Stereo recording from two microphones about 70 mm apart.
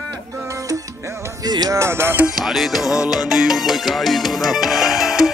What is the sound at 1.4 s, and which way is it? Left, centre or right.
Music, right.